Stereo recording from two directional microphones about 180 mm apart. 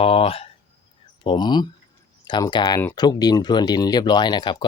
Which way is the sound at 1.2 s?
25° left (ahead or behind).